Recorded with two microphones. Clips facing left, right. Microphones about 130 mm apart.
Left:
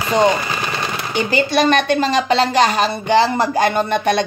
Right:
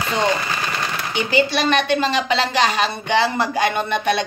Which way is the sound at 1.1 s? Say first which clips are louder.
Left 2 dB; 45° left (ahead or behind).